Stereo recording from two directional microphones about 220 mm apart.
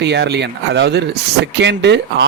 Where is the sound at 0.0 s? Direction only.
50° right (ahead or behind).